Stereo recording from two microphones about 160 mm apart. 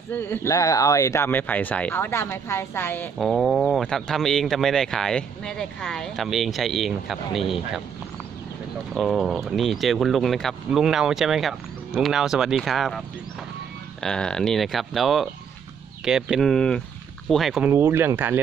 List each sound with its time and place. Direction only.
0.1 s speech: 15° left (ahead or behind)
3.2 s speech: centre (ahead or behind)
8.9 s speech: centre (ahead or behind)
14.0 s speech: 5° left (ahead or behind)
17.6 s speech: 15° right (ahead or behind)